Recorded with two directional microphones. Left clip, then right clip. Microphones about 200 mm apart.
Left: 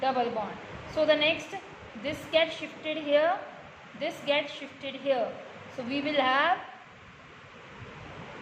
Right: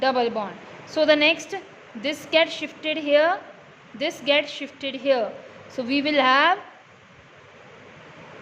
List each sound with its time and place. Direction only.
0.0 s a woman's voice: 55° right (ahead or behind)